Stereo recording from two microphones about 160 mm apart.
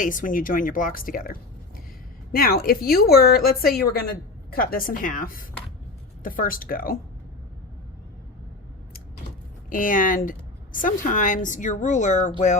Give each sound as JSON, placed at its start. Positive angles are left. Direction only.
{"t": 0.0, "sound": "a woman's voice", "side_deg": 55}
{"t": 9.6, "sound": "a woman's voice", "side_deg": 60}